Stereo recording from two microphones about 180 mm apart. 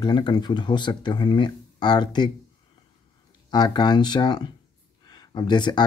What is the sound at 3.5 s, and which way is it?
Speech, 25° left (ahead or behind).